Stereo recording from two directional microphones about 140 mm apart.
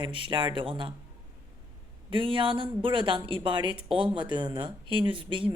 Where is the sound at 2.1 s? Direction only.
40° right (ahead or behind).